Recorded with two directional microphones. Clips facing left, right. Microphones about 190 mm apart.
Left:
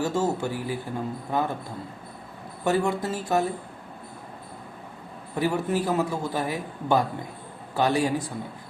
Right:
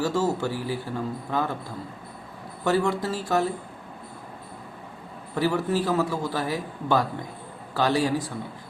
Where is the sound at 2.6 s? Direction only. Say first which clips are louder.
Right 1 dB; 15° left (ahead or behind).